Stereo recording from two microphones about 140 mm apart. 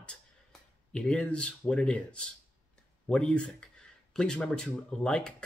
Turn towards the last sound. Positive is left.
turn(degrees=5)  # may be behind; listen again after turning